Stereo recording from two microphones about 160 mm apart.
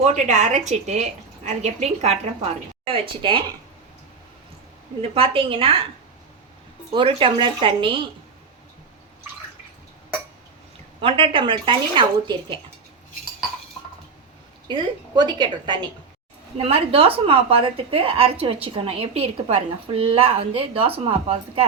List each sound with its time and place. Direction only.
0.0 s a woman's voice: 45° right (ahead or behind); by 3.4 s 30° right (ahead or behind)
5.1 s a woman's voice: 35° right (ahead or behind)
6.9 s a woman's voice: 35° right (ahead or behind)
11.0 s a woman's voice: 35° right (ahead or behind)
14.7 s a woman's voice: 30° right (ahead or behind)